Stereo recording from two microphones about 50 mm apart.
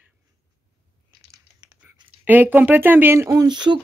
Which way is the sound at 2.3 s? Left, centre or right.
Right.